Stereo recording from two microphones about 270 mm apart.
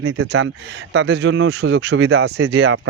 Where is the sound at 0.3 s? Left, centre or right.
Right.